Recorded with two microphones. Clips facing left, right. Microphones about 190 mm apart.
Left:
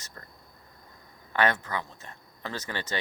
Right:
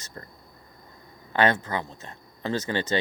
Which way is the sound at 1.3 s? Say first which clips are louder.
Right 4 dB; 25° right (ahead or behind).